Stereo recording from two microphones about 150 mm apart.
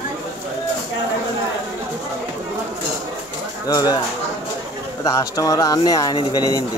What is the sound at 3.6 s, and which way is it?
Speech, 25° left (ahead or behind).